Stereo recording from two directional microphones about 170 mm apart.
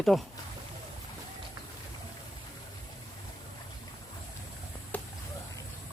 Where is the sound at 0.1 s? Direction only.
Centre (ahead or behind).